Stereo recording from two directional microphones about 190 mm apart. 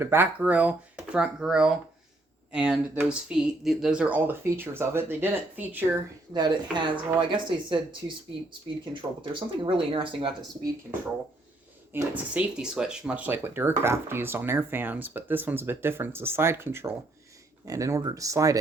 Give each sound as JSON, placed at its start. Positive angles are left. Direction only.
{"t": 0.0, "sound": "speech", "side_deg": -10}
{"t": 6.3, "sound": "speech", "side_deg": -25}
{"t": 11.9, "sound": "speech", "side_deg": -10}